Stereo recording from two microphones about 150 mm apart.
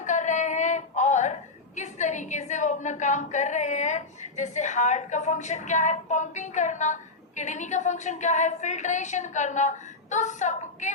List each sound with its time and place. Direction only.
0.0 s a woman's voice: 55° left (ahead or behind)